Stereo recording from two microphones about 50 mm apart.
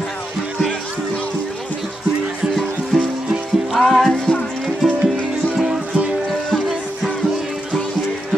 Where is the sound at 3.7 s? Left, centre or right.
Centre.